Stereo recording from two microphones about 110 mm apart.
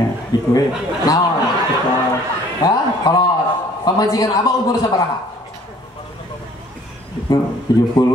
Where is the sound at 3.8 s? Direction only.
35° left (ahead or behind).